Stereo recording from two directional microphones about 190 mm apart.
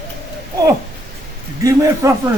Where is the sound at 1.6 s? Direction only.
15° right (ahead or behind).